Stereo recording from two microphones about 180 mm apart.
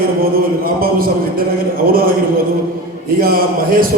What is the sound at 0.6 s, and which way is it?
Speech, 55° right (ahead or behind).